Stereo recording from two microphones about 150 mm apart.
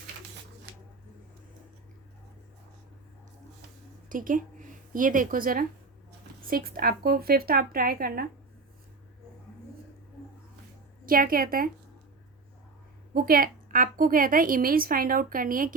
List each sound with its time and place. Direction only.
4.1 s speech: 65° right (ahead or behind); by 8.3 s 80° right
11.0 s a woman's voice: 70° right (ahead or behind)
13.1 s a woman's voice: 75° right (ahead or behind)